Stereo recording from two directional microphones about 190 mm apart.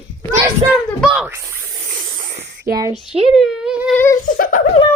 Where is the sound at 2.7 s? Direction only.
50° right (ahead or behind).